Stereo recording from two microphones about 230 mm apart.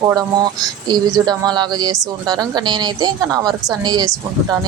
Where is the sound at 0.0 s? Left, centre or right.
Centre.